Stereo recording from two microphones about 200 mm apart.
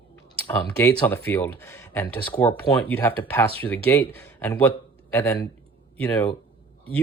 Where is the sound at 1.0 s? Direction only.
10° left (ahead or behind).